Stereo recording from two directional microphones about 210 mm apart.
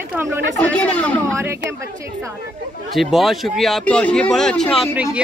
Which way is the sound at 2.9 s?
Centre (ahead or behind).